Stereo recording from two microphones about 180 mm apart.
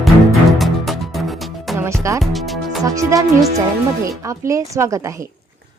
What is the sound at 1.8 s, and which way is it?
Music, 15° right (ahead or behind).